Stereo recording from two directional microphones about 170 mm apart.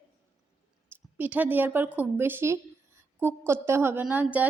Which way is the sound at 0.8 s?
10° right (ahead or behind).